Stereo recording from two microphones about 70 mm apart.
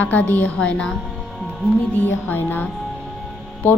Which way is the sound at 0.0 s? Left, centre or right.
Left.